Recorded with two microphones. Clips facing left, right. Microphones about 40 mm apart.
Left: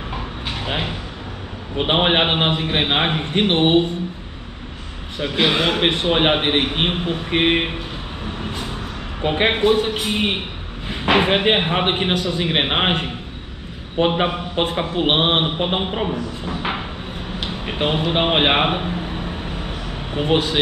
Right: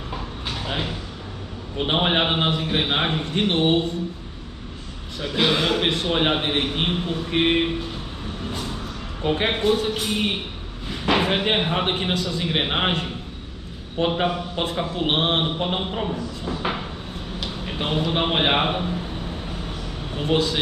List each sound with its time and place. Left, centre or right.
0.1 s a sound: left
1.8 s a man's voice: left
5.2 s a man's voice: left
8.4 s vehicle: left
9.2 s a man's voice: left
17.4 s a sound: left